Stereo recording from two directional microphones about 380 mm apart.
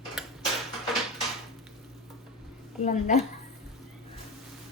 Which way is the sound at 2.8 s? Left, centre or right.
Centre.